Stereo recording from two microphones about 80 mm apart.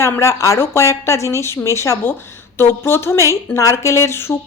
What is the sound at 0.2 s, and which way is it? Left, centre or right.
Speech, left.